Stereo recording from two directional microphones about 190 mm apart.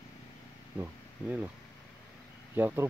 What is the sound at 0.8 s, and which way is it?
Speech, 10° right (ahead or behind).